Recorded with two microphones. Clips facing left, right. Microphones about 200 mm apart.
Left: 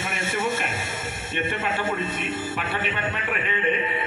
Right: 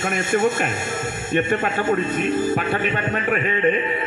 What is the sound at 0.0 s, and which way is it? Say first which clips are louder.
Speech: right 8 dB; 50° right (ahead or behind).